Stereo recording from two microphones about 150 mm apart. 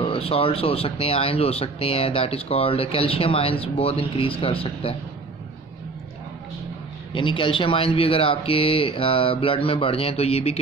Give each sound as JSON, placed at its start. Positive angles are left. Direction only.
{"t": 0.0, "sound": "speech", "side_deg": 35}
{"t": 7.2, "sound": "speech", "side_deg": 35}